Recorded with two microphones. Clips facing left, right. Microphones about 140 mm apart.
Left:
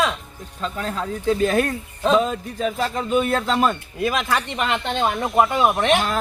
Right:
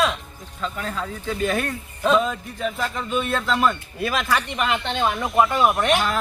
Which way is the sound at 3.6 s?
20° left (ahead or behind).